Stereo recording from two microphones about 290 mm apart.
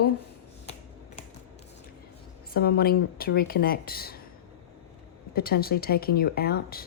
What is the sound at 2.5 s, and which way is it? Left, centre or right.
Speech, left.